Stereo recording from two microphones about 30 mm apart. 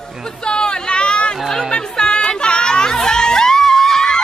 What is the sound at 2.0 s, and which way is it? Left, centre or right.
Crowd, left.